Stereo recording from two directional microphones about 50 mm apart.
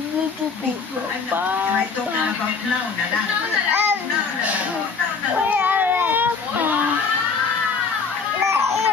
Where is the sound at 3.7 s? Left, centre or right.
Right.